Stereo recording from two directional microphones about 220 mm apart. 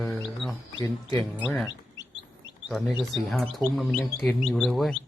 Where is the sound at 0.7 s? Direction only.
15° left (ahead or behind).